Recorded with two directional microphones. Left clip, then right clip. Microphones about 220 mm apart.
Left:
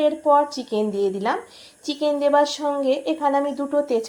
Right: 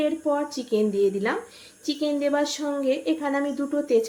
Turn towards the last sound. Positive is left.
turn(degrees=5)  # may be behind; listen again after turning